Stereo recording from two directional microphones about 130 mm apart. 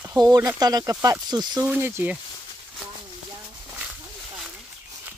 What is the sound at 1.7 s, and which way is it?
Speech, 15° right (ahead or behind).